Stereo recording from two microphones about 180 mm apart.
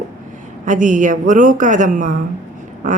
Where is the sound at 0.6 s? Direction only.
45° right (ahead or behind).